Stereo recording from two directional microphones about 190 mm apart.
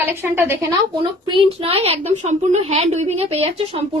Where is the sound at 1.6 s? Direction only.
30° right (ahead or behind).